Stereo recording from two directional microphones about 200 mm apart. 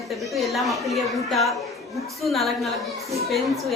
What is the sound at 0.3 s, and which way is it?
A woman's voice, centre (ahead or behind).